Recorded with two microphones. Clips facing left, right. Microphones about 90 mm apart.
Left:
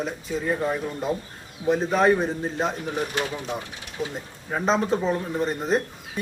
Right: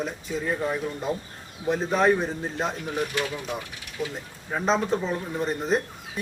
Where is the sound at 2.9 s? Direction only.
30° left (ahead or behind).